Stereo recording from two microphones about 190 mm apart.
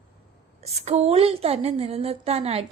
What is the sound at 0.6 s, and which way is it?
Speech, 35° right (ahead or behind).